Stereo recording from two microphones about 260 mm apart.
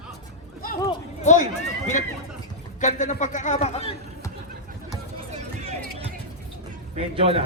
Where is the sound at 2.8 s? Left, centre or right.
Left.